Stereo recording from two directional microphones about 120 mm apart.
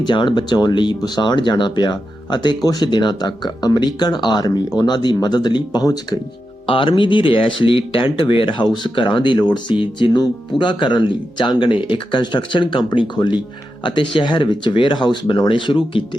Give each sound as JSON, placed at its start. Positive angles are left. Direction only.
{"t": 0.0, "sound": "speech", "side_deg": 40}
{"t": 6.7, "sound": "speech", "side_deg": 45}